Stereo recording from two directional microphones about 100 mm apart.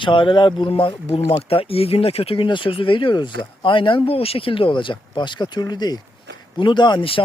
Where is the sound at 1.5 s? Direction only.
75° left (ahead or behind); by 7.0 s 50° left (ahead or behind).